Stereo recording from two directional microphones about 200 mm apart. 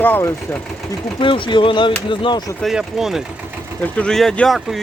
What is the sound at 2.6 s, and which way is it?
Speech, centre (ahead or behind).